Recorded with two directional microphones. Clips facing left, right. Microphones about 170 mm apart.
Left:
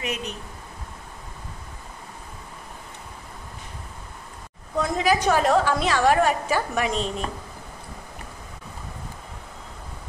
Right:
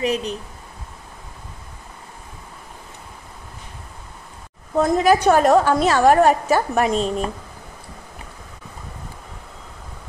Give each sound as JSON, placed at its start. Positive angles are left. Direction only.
{"t": 0.0, "sound": "speech", "side_deg": -35}
{"t": 4.7, "sound": "a woman's voice", "side_deg": -45}